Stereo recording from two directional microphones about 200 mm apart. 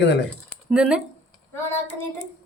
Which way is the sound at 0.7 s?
5° right (ahead or behind).